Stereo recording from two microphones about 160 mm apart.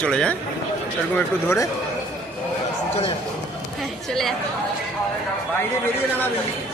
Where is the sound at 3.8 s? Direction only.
Centre (ahead or behind).